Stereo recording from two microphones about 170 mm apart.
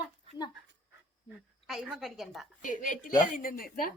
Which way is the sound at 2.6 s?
50° left (ahead or behind).